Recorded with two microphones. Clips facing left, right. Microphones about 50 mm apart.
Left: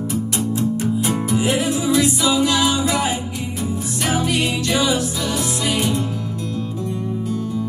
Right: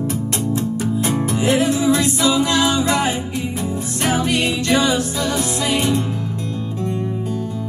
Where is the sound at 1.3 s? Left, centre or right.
Right.